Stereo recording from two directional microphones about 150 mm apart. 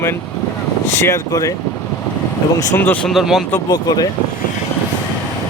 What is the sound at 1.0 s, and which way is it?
Speech, 20° left (ahead or behind).